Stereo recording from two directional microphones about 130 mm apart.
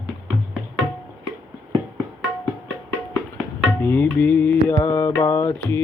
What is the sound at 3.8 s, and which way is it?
Mantra, 15° left (ahead or behind).